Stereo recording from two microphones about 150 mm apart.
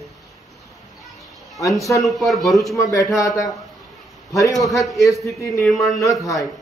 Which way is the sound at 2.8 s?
20° left (ahead or behind).